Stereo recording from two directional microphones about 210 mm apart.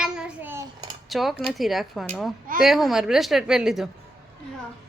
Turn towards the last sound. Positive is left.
turn(degrees=0)  # may be behind; listen again after turning